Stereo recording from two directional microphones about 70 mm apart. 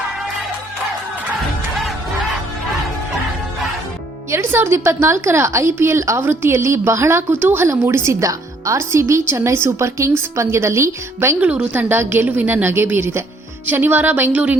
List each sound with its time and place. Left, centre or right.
4.3 s a woman's voice: right
8.2 s a woman's voice: right
11.3 s speech: centre
11.8 s a woman's voice: right